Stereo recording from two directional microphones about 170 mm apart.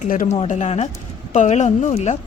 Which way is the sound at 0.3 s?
40° left (ahead or behind).